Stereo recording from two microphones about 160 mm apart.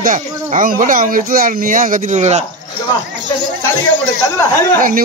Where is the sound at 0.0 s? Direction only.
55° right (ahead or behind).